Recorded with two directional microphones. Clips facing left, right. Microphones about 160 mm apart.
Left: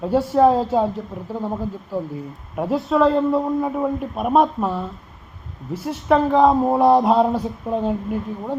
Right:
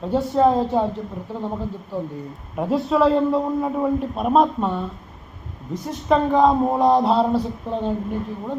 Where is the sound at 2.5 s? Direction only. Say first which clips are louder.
Even; centre (ahead or behind).